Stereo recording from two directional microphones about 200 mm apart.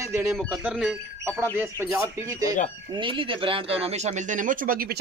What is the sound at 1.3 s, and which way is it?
Speech, 10° right (ahead or behind).